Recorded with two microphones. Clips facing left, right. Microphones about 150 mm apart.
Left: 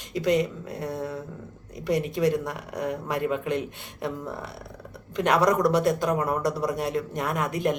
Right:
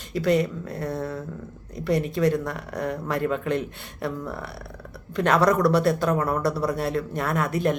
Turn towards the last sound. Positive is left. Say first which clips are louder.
# right 2 dB
turn(degrees=15)  # may be behind; listen again after turning